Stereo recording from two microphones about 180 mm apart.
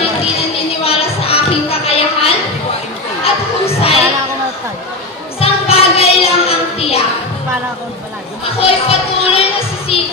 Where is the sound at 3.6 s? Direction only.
35° left (ahead or behind).